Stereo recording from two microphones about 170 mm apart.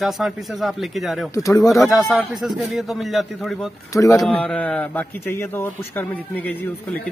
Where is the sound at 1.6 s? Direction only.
Centre (ahead or behind).